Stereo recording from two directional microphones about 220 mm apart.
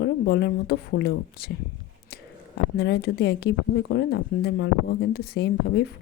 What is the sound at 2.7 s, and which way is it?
Speech, 45° left (ahead or behind).